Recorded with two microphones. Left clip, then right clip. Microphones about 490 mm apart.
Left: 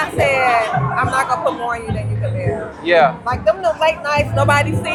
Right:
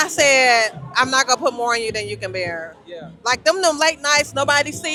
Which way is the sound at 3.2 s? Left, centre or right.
Right.